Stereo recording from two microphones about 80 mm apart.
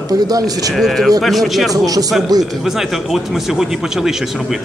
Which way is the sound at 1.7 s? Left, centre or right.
Right.